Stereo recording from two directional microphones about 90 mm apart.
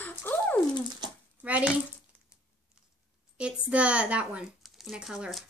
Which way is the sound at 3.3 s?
10° right (ahead or behind).